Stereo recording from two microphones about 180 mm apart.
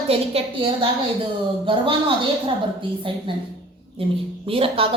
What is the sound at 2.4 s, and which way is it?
A woman's voice, 30° right (ahead or behind).